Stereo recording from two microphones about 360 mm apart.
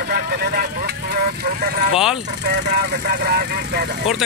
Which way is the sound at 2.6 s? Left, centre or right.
Right.